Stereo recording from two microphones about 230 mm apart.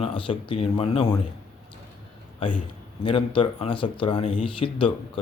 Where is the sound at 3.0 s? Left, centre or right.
Left.